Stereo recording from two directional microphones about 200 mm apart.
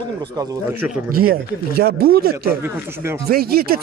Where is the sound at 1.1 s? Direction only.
50° right (ahead or behind).